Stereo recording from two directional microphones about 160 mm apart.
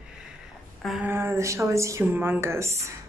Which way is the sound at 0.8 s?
5° right (ahead or behind).